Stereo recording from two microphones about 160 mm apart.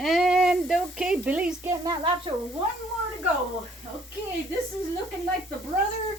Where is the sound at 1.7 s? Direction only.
25° right (ahead or behind).